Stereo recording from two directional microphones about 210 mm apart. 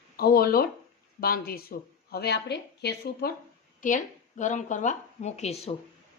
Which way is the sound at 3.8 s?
35° left (ahead or behind).